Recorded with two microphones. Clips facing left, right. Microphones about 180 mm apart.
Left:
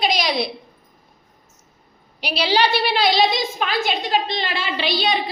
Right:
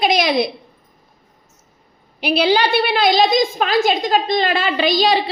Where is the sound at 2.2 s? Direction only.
55° right (ahead or behind).